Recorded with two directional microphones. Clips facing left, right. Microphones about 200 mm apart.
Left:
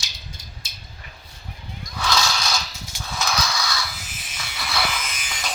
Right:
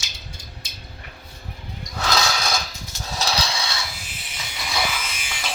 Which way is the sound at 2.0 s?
40° right (ahead or behind).